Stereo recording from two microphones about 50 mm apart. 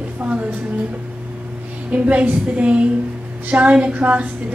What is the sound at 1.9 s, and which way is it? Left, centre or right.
A woman's voice, right.